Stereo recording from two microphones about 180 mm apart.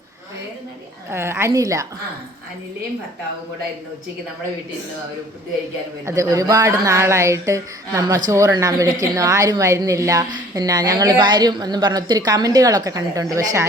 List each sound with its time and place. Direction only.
1.1 s speech: 15° right (ahead or behind)
6.1 s a woman's voice: 15° right (ahead or behind)